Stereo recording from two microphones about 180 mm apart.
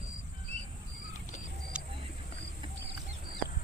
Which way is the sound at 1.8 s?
5° right (ahead or behind).